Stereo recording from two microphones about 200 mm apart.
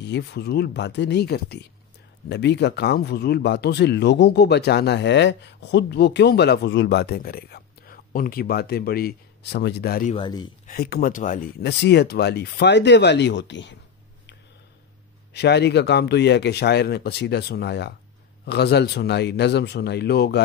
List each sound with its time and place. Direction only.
0.0 s speech: 55° left (ahead or behind)
10.1 s speech: 20° left (ahead or behind)
10.7 s speech: 50° left (ahead or behind)
11.6 s speech: 55° left (ahead or behind)
15.3 s speech: 55° left (ahead or behind)